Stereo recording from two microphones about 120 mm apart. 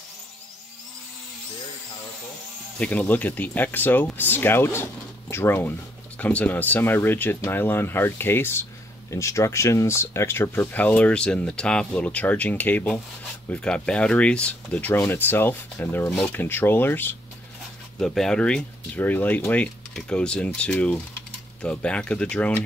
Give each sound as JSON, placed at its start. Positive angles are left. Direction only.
{"t": 2.8, "sound": "speech", "side_deg": 10}
{"t": 17.9, "sound": "speech", "side_deg": 5}